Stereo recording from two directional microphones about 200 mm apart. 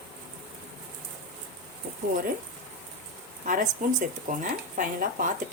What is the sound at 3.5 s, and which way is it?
Speech, 40° right (ahead or behind).